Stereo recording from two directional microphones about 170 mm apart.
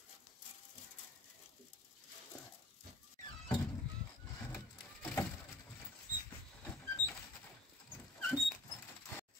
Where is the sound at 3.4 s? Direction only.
25° left (ahead or behind).